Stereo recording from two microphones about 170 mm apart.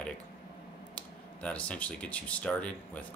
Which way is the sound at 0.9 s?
5° left (ahead or behind).